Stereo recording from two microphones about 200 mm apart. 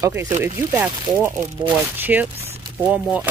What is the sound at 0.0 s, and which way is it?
Speech, 15° right (ahead or behind).